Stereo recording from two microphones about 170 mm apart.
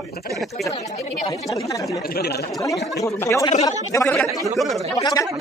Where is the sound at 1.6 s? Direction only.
20° left (ahead or behind).